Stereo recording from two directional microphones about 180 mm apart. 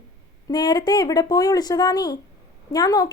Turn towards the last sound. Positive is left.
turn(degrees=20)  # may be behind; listen again after turning